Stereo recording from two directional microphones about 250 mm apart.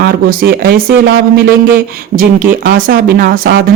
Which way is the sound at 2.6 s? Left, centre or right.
Right.